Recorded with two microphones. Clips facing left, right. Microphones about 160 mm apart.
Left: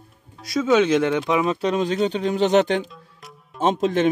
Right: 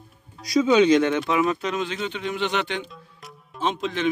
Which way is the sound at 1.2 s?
20° left (ahead or behind).